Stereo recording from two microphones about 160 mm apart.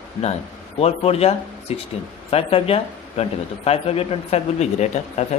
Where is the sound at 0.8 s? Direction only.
40° left (ahead or behind).